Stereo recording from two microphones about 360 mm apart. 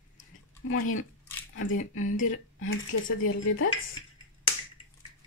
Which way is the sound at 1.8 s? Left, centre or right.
Left.